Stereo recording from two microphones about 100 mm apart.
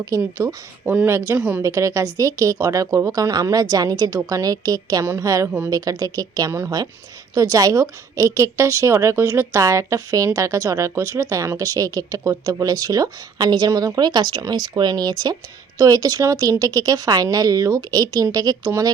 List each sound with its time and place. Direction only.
0.0 s a woman's voice: 35° right (ahead or behind)
5.5 s speech: 20° right (ahead or behind)
5.7 s a woman's voice: 35° right (ahead or behind)